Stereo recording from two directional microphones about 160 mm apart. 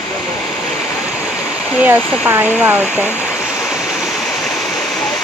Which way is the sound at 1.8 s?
10° right (ahead or behind).